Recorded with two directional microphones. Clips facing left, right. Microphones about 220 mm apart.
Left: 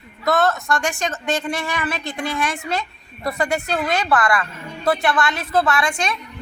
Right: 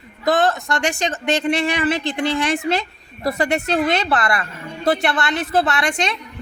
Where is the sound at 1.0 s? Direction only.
30° right (ahead or behind).